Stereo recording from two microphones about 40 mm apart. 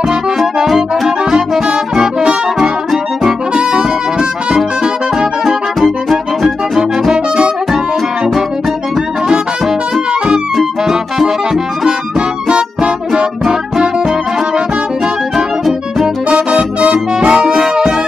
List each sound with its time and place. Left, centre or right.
0.7 s music: centre
3.5 s brass instrument: centre
5.8 s music: centre
6.8 s music: centre
10.9 s music: centre
12.2 s music: right
16.3 s music: right